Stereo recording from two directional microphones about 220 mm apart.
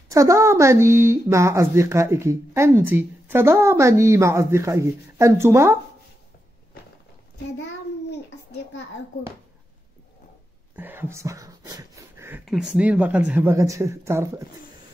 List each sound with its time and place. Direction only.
0.1 s speech: 15° right (ahead or behind)
8.1 s a sound: 50° left (ahead or behind)
10.8 s speech: 10° right (ahead or behind)